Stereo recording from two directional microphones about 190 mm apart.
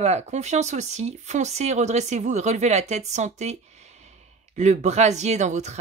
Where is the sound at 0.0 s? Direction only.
35° right (ahead or behind).